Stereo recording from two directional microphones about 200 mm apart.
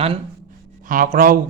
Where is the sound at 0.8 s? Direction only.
45° right (ahead or behind).